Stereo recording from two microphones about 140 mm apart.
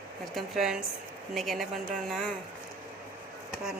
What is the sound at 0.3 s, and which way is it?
Speech, 5° right (ahead or behind).